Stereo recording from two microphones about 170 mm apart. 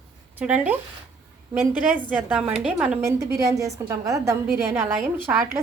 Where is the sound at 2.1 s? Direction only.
5° right (ahead or behind).